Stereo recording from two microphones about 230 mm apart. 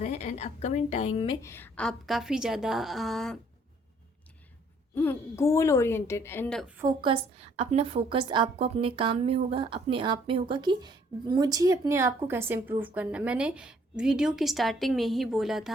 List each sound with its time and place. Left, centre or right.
0.0 s a woman's voice: left
1.4 s a woman's voice: centre
4.9 s a woman's voice: centre
6.8 s a woman's voice: right; by 15.7 s centre